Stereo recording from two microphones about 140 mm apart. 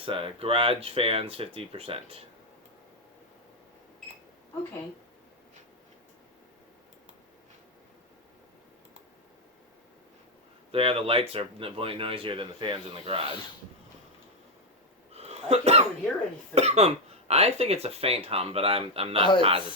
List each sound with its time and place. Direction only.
0.0 s speech: 40° right (ahead or behind)
10.7 s speech: 40° right (ahead or behind)
15.1 s cough: 45° right (ahead or behind)
16.6 s speech: 50° right (ahead or behind)